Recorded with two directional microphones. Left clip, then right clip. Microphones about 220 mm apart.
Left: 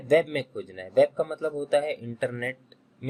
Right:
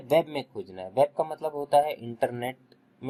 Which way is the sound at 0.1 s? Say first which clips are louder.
Left 2 dB; 20° right (ahead or behind).